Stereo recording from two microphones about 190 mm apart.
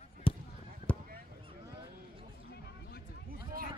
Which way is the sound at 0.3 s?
30° left (ahead or behind).